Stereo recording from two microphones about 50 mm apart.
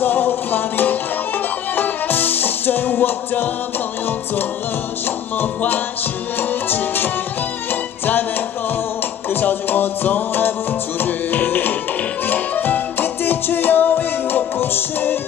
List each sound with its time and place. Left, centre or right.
0.0 s music: left
6.7 s music: left
9.3 s music: left